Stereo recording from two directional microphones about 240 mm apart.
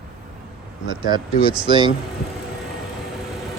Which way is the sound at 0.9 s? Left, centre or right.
Centre.